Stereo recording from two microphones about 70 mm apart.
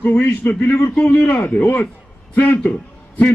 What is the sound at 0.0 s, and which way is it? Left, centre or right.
A man's voice, centre.